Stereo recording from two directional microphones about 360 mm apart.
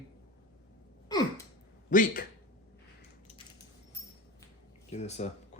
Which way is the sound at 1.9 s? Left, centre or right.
Left.